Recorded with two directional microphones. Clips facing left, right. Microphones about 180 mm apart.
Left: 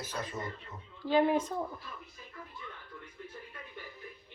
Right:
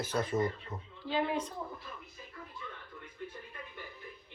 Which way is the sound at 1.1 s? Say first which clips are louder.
Left 6 dB; 45° left (ahead or behind).